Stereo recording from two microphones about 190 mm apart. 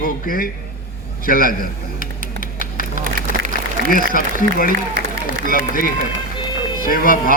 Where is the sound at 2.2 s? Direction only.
45° right (ahead or behind).